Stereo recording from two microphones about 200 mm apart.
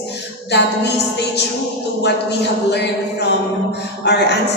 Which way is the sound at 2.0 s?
55° left (ahead or behind).